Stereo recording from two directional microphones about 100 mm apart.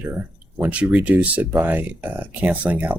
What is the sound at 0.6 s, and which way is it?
Speech, 15° right (ahead or behind).